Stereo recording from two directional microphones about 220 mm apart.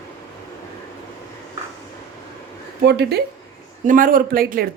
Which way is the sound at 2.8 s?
50° right (ahead or behind).